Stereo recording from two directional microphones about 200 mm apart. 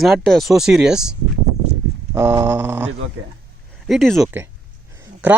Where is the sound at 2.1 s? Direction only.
15° right (ahead or behind).